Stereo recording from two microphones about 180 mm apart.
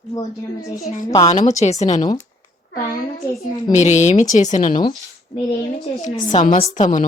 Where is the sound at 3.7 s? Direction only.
40° left (ahead or behind).